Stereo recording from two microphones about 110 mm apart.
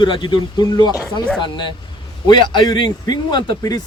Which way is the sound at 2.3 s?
45° left (ahead or behind).